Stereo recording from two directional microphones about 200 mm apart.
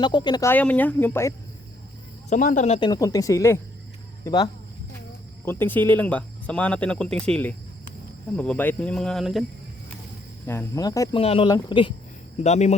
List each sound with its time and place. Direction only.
0.0 s speech: 20° left (ahead or behind)
0.5 s speech: 5° left (ahead or behind)
2.3 s speech: 40° left (ahead or behind)
2.9 s speech: 15° left (ahead or behind)
5.5 s speech: 10° left (ahead or behind)
10.4 s speech: 10° left (ahead or behind)
11.2 s speech: 30° left (ahead or behind)